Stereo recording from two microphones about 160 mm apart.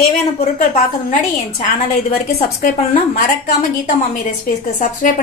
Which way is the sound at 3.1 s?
50° left (ahead or behind).